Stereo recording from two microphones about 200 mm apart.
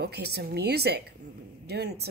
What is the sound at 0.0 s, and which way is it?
Speech, 55° right (ahead or behind).